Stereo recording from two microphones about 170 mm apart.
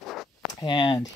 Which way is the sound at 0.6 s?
25° left (ahead or behind).